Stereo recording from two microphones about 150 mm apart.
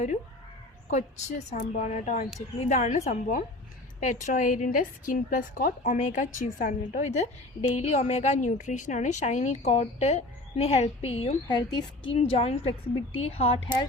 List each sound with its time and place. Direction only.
0.9 s a woman's voice: 50° left (ahead or behind); by 11.9 s 30° left (ahead or behind)
12.1 s a woman's voice: 40° left (ahead or behind)